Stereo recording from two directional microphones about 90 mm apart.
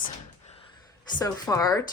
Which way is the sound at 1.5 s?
40° left (ahead or behind).